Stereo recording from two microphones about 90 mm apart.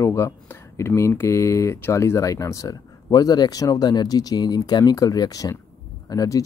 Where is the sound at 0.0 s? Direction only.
30° left (ahead or behind).